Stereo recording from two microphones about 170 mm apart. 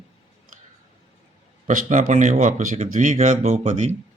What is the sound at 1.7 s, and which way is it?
Speech, 50° right (ahead or behind).